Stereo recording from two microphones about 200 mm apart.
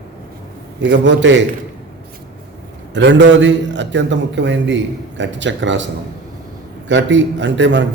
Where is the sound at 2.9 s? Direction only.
65° right (ahead or behind).